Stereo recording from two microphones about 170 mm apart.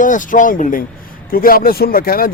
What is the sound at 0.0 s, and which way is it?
Speech, 50° left (ahead or behind).